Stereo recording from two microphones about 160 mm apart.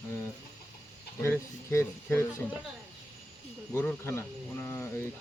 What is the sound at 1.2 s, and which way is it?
Speech, 15° left (ahead or behind).